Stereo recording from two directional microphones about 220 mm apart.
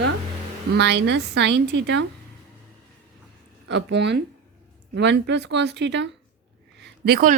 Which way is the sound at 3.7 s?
50° right (ahead or behind).